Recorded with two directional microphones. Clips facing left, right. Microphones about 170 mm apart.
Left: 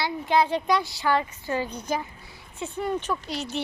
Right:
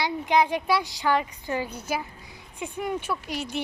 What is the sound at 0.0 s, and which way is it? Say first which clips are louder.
Speech: even; 15° right (ahead or behind).